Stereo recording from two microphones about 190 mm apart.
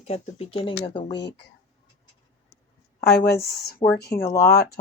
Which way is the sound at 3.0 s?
55° left (ahead or behind).